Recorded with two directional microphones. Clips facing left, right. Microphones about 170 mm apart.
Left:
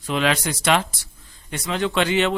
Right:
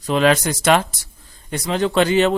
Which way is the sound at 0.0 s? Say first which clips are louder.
Right 6 dB; 40° right (ahead or behind).